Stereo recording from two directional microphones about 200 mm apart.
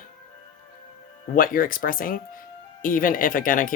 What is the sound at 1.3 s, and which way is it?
Speech, 45° left (ahead or behind).